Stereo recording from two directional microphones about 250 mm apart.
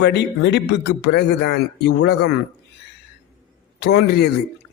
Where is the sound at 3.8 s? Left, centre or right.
Left.